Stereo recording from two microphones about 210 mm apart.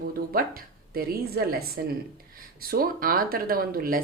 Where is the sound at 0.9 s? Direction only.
45° right (ahead or behind).